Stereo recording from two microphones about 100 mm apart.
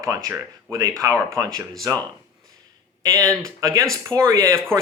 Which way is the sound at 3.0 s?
30° right (ahead or behind).